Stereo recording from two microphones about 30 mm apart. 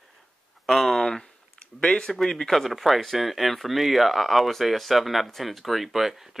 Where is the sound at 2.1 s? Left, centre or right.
Centre.